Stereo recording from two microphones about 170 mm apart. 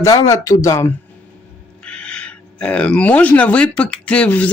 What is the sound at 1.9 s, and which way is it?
Speech, 5° left (ahead or behind).